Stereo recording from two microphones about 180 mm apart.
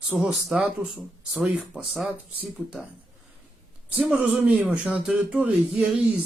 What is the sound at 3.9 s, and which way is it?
Speech, 5° right (ahead or behind).